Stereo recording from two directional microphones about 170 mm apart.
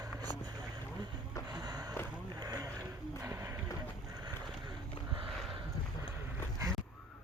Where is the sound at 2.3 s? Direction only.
20° right (ahead or behind).